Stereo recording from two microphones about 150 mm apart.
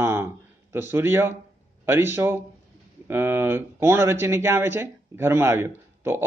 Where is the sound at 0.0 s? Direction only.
15° right (ahead or behind).